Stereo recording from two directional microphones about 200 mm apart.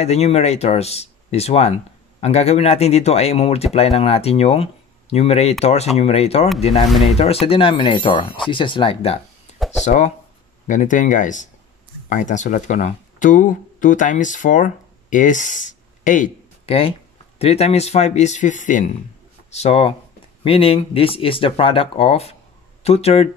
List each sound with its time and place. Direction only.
0.0 s speech: 30° left (ahead or behind)